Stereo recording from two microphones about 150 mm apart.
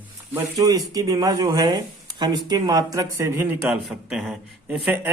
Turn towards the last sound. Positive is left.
turn(degrees=-10)  # may be behind; listen again after turning